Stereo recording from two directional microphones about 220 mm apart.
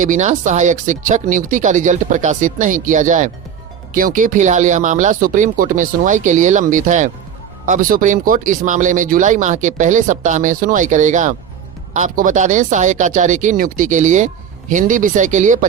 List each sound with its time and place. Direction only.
0.0 s speech: 35° right (ahead or behind)